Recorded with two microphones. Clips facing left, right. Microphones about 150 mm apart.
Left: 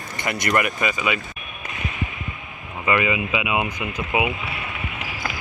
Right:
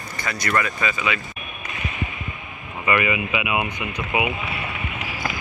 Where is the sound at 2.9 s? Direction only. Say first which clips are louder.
Even; 20° left (ahead or behind).